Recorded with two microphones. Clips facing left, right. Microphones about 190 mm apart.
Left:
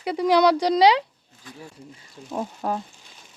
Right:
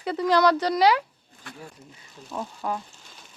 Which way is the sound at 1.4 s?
70° right (ahead or behind).